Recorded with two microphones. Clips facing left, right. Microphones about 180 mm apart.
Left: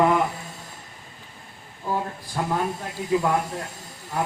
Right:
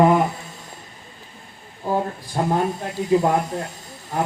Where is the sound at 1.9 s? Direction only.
30° right (ahead or behind).